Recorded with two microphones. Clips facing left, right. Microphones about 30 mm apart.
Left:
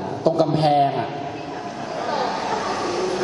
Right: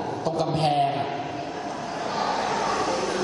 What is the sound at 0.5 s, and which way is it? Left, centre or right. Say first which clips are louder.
Speech: left 2 dB; centre.